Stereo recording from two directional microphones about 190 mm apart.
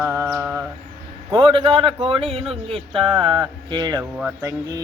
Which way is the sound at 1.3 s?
25° right (ahead or behind).